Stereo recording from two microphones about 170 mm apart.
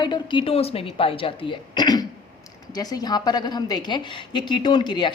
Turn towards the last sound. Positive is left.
turn(degrees=25)  # may be behind; listen again after turning